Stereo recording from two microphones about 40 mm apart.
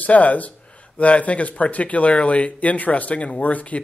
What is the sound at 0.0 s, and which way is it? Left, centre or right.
Speech, left.